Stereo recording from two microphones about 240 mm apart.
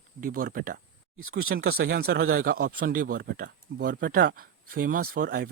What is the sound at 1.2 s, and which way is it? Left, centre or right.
Speech, right.